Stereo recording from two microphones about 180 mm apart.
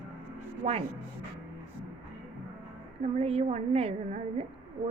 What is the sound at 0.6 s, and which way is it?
Speech, 35° right (ahead or behind).